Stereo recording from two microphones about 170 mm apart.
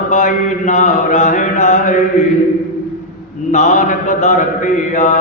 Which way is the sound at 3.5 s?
45° left (ahead or behind).